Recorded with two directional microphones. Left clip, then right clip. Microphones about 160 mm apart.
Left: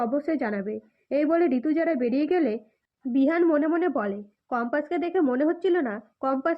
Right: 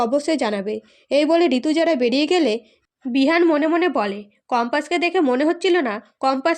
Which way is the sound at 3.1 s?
30° right (ahead or behind).